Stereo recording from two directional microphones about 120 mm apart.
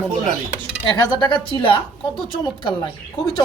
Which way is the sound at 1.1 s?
40° left (ahead or behind).